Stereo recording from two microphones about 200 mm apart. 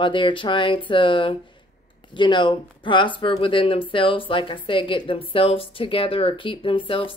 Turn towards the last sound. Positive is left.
turn(degrees=25)  # may be behind; listen again after turning